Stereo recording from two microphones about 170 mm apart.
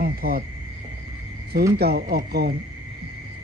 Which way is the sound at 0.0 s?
60° right (ahead or behind).